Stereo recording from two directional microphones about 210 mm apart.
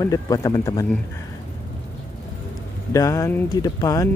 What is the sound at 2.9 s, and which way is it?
Speech, 15° left (ahead or behind).